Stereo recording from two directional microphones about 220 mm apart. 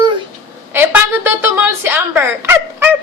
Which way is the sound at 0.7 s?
10° right (ahead or behind).